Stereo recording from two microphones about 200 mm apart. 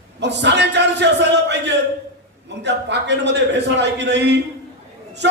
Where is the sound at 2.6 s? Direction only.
60° right (ahead or behind).